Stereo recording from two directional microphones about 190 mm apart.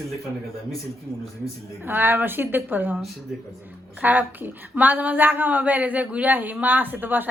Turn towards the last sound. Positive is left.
turn(degrees=-10)  # may be behind; listen again after turning